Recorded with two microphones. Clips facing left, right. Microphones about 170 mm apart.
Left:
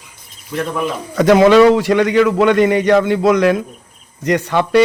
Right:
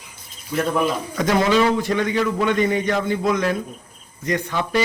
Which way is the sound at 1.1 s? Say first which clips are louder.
Left 11 dB; 70° left (ahead or behind).